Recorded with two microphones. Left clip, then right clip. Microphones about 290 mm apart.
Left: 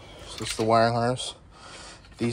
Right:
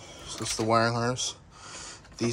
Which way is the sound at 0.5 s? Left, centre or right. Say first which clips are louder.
Left 4 dB; centre.